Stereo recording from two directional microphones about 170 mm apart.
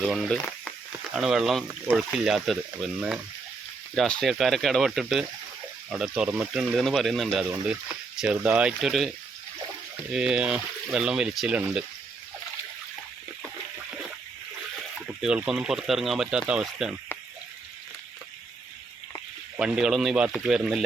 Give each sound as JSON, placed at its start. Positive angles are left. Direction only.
{"t": 0.0, "sound": "speech", "side_deg": 0}
{"t": 10.1, "sound": "speech", "side_deg": -5}
{"t": 15.0, "sound": "speech", "side_deg": -5}
{"t": 19.5, "sound": "speech", "side_deg": -5}